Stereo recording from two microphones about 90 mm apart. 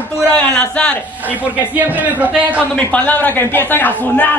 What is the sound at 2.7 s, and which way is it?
A man's voice, 15° left (ahead or behind).